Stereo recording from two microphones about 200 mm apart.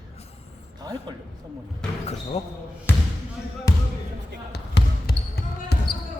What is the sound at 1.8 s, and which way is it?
Speech, 5° left (ahead or behind).